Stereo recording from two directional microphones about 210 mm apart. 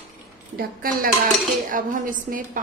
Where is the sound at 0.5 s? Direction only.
45° right (ahead or behind).